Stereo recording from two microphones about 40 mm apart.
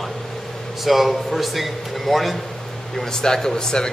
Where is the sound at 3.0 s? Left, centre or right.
Centre.